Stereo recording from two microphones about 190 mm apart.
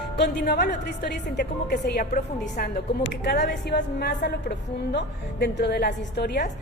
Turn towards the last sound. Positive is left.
turn(degrees=60)  # may be behind; listen again after turning